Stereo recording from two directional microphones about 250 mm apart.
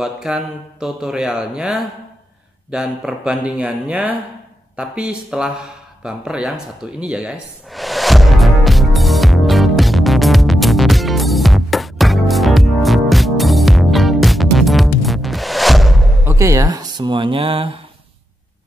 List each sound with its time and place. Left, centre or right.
0.0 s speech: centre
7.7 s music: centre
16.3 s speech: centre